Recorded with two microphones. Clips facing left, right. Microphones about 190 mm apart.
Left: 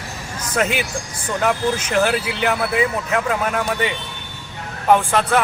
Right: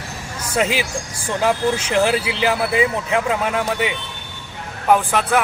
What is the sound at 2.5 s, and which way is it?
A man's voice, 5° right (ahead or behind).